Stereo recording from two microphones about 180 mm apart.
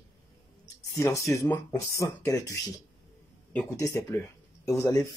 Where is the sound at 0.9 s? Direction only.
15° left (ahead or behind).